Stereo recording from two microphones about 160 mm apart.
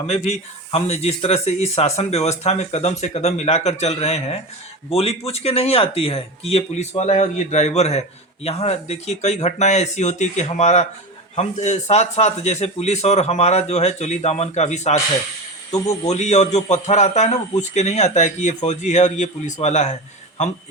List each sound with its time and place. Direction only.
0.1 s speech: 40° left (ahead or behind)
16.0 s speech: 45° left (ahead or behind)